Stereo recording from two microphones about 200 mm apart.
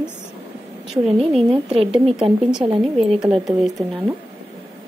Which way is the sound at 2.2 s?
5° right (ahead or behind).